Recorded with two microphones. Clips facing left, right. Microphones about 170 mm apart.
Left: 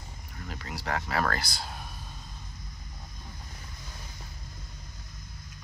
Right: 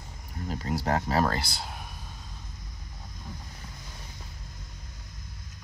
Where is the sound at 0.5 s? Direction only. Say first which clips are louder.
Right 6 dB; 35° right (ahead or behind).